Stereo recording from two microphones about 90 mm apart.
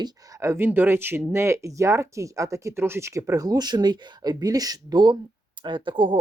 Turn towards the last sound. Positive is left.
turn(degrees=-65)  # may be behind; listen again after turning